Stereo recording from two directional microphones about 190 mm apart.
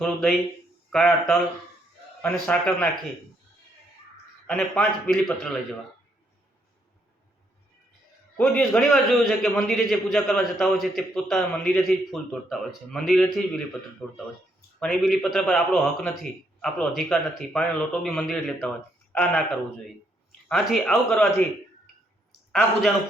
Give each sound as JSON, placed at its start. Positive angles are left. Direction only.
{"t": 0.0, "sound": "a man's voice", "side_deg": 5}
{"t": 4.4, "sound": "a man's voice", "side_deg": 5}
{"t": 8.4, "sound": "a man's voice", "side_deg": 5}
{"t": 20.5, "sound": "a man's voice", "side_deg": 0}